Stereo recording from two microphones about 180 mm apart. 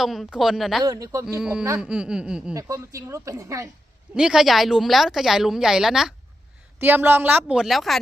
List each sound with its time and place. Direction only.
0.0 s a woman's voice: centre (ahead or behind)
0.9 s speech: 20° right (ahead or behind)
1.4 s a woman's voice: 5° right (ahead or behind)
2.6 s a woman's voice: 20° right (ahead or behind)
4.1 s a woman's voice: 5° right (ahead or behind)